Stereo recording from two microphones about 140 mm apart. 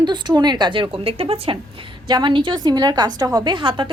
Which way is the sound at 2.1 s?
30° right (ahead or behind).